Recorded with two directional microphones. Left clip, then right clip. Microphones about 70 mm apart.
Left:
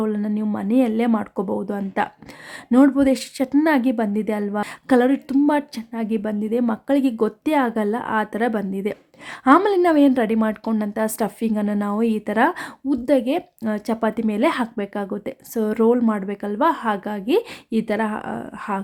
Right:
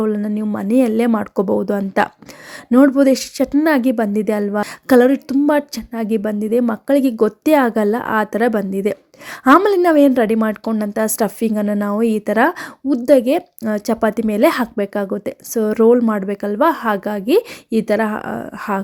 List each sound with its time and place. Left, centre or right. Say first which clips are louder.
0.0 s a woman's voice: right 4 dB; right
1.5 s speech: right 6 dB; right
2.6 s speech: right 4 dB; centre
2.9 s speech: right 5 dB; right
5.5 s speech: right 4 dB; right
7.4 s a woman's voice: right 7 dB; right
10.9 s speech: right 7 dB; right
11.6 s speech: right 4 dB; right